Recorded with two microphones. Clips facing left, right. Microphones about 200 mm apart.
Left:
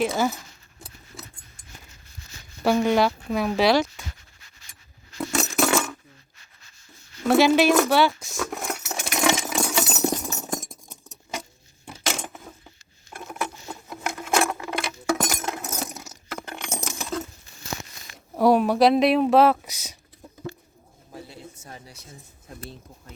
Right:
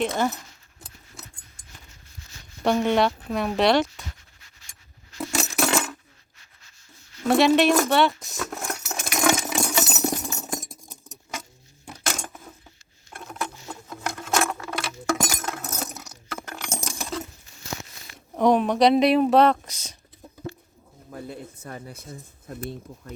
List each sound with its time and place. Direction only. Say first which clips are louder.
0.0 s speech: left 1 dB; 5° left (ahead or behind)
2.6 s speech: left 1 dB; 5° left (ahead or behind)
5.1 s coin: left 2 dB; centre (ahead or behind)
7.3 s speech: left 1 dB; centre (ahead or behind)
8.6 s a sound: left 1 dB; 15° left (ahead or behind)
9.4 s a sound: even; centre (ahead or behind)
9.9 s clip-clop: left 2 dB; 10° right (ahead or behind)
12.0 s a sound: left 2 dB; 5° left (ahead or behind)
15.9 s coin: left 1 dB; centre (ahead or behind)
16.3 s coin: left 1 dB; 10° left (ahead or behind)
18.3 s speech: left 1 dB; 5° left (ahead or behind)
21.2 s a sound: right 5 dB; 55° right (ahead or behind)